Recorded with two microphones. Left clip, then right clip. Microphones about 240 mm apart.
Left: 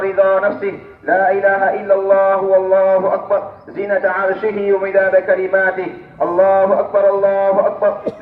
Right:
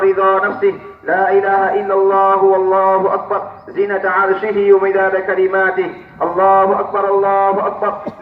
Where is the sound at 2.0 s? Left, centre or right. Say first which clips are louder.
Right 2 dB; left.